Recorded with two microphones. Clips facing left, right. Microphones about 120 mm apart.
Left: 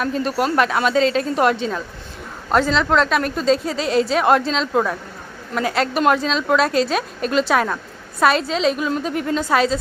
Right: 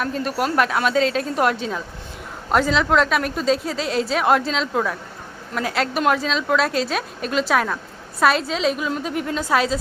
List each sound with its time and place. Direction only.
0.0 s a woman's voice: centre (ahead or behind)